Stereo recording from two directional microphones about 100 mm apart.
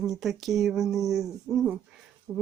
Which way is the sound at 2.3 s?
15° right (ahead or behind).